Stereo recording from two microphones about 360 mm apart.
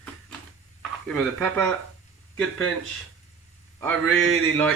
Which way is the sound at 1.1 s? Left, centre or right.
Centre.